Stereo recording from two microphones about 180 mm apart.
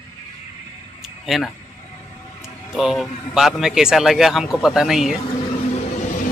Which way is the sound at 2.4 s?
Centre (ahead or behind).